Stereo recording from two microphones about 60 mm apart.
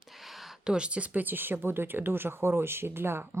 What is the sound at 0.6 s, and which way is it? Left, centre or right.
Speech, centre.